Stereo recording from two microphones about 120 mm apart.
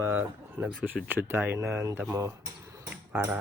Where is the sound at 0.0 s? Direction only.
15° right (ahead or behind).